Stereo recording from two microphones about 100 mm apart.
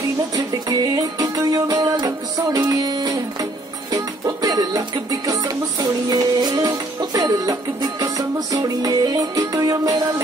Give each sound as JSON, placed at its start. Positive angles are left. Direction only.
{"t": 0.7, "sound": "music", "side_deg": -40}